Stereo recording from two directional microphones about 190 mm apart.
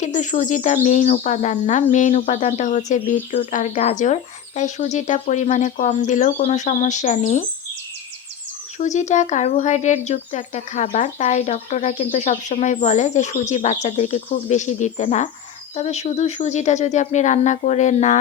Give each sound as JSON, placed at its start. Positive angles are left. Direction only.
{"t": 0.0, "sound": "speech", "side_deg": 40}
{"t": 8.8, "sound": "speech", "side_deg": 40}